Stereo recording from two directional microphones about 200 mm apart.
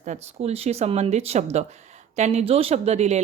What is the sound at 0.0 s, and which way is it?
Speech, 35° right (ahead or behind).